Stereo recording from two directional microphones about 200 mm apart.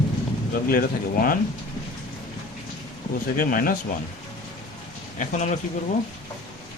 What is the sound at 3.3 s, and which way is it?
Speech, 45° left (ahead or behind).